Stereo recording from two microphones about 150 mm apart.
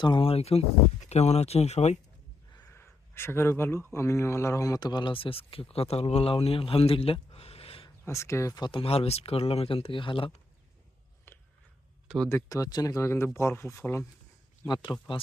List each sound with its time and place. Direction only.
0.0 s speech: 35° left (ahead or behind)
2.6 s a man's voice: 15° left (ahead or behind); by 7.9 s 40° left (ahead or behind)
8.0 s speech: 20° left (ahead or behind); by 10.3 s 35° left (ahead or behind)
11.3 s a sound: 15° left (ahead or behind)
12.0 s speech: 5° left (ahead or behind)
12.3 s speech: 20° left (ahead or behind)